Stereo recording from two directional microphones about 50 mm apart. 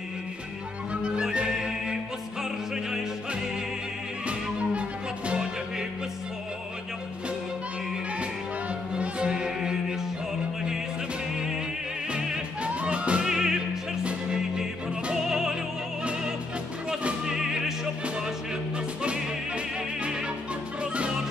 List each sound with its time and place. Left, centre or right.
1.0 s music: centre
4.3 s music: right
8.9 s music: right
12.1 s music: centre
13.2 s music: centre
16.0 s opera: right
17.3 s music: centre
19.0 s music: right